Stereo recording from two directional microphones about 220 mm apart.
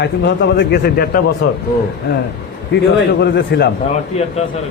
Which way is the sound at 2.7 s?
50° left (ahead or behind).